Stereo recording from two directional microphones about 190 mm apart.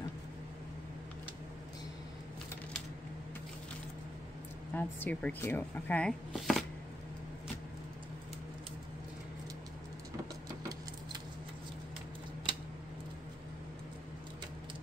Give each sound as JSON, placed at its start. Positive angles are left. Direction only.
{"t": 4.7, "sound": "speech", "side_deg": 10}